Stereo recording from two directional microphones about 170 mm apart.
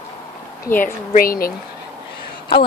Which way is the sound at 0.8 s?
55° left (ahead or behind).